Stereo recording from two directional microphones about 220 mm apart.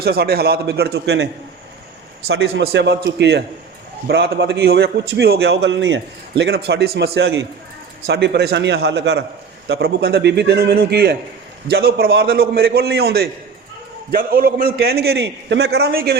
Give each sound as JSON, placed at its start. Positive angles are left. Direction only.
{"t": 0.0, "sound": "a man's voice", "side_deg": -45}
{"t": 2.3, "sound": "a man's voice", "side_deg": -65}